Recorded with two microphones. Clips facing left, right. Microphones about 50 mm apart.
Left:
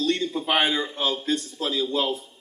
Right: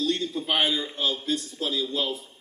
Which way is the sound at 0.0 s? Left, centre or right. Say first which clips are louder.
Left 2 dB; left.